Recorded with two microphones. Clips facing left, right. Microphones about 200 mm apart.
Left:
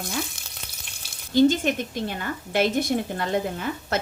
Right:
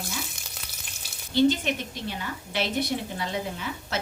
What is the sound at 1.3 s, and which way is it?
A woman's voice, 45° left (ahead or behind).